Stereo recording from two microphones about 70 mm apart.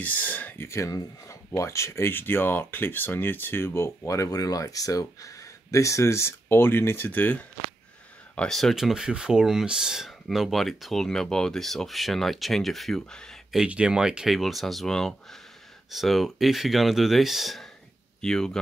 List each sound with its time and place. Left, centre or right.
0.0 s speech: left
0.7 s speech: left
7.1 s speech: left
8.5 s speech: centre
8.7 s speech: centre
13.7 s speech: centre